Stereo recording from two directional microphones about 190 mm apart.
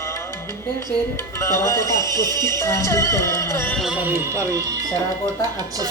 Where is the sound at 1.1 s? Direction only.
15° left (ahead or behind).